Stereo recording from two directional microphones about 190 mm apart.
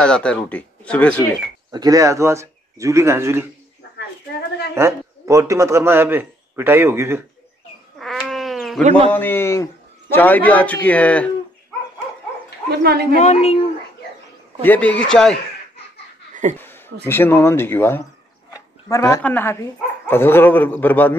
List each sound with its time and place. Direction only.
0.0 s speech: 5° left (ahead or behind)
1.7 s a man's voice: 20° right (ahead or behind)
4.7 s a man's voice: 15° right (ahead or behind)
8.0 s cat: centre (ahead or behind)
8.8 s a man's voice: 30° right (ahead or behind)
9.1 s speech: 10° left (ahead or behind)
12.6 s speech: 55° right (ahead or behind)
13.2 s speech: 35° left (ahead or behind)
14.6 s speech: 10° left (ahead or behind)
17.0 s speech: 10° left (ahead or behind)